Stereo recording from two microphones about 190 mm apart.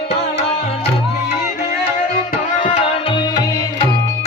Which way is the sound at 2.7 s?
30° left (ahead or behind).